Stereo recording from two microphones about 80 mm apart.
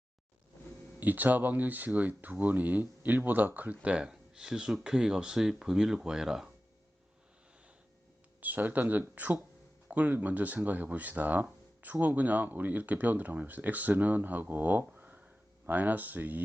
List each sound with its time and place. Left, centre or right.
0.9 s speech: right
8.4 s speech: right